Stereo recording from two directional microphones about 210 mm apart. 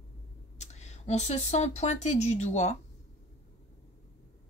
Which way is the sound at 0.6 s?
30° left (ahead or behind).